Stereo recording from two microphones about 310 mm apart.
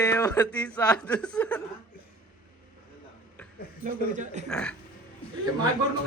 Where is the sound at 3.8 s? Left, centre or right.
Right.